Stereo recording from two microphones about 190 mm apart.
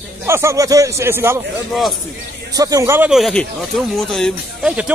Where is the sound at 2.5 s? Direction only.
20° right (ahead or behind).